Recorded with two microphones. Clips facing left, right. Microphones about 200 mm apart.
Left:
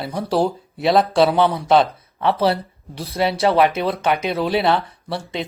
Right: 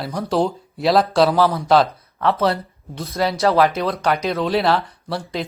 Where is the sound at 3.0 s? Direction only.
30° left (ahead or behind).